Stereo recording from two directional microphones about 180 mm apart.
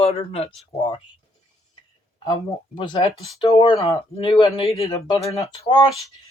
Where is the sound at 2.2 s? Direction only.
25° left (ahead or behind).